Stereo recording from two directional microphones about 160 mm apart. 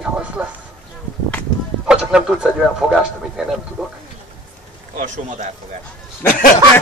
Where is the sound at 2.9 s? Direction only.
Centre (ahead or behind).